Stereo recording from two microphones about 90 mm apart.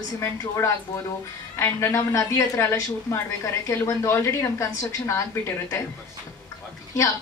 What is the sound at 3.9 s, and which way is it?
Speech, 35° left (ahead or behind).